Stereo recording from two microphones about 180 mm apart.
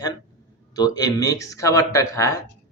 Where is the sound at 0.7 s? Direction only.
20° left (ahead or behind).